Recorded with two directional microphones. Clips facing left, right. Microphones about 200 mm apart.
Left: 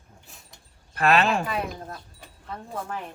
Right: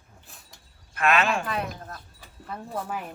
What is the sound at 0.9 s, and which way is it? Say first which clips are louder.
Speech: left 2 dB; 35° left (ahead or behind).